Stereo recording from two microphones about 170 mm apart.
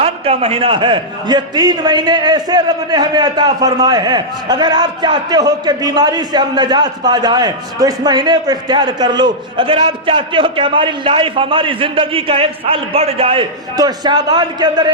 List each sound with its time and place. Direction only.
0.0 s a man's voice: 35° right (ahead or behind)
13.7 s a man's voice: 25° right (ahead or behind)